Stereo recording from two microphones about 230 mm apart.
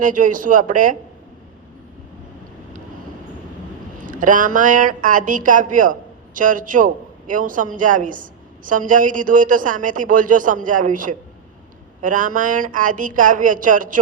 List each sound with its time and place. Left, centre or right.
0.0 s speech: right
4.0 s speech: right